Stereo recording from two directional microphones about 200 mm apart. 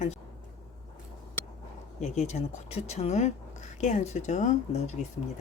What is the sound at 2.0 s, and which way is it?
Speech, 35° left (ahead or behind).